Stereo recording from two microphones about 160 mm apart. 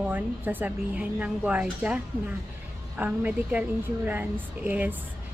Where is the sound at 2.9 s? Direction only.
10° right (ahead or behind).